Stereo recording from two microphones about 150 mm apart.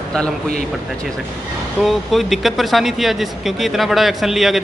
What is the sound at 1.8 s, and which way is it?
Speech, centre (ahead or behind).